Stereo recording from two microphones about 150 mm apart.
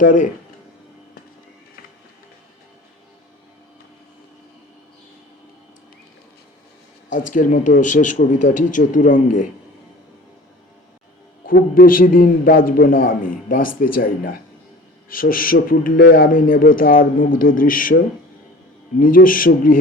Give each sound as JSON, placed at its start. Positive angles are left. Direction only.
{"t": 0.0, "sound": "a man's voice", "side_deg": 60}
{"t": 7.1, "sound": "a man's voice", "side_deg": 60}
{"t": 11.4, "sound": "a man's voice", "side_deg": 70}
{"t": 18.9, "sound": "a man's voice", "side_deg": 70}